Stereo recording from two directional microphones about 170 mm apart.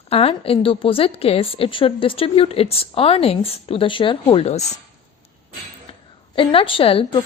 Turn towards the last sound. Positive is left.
turn(degrees=35)  # may be behind; listen again after turning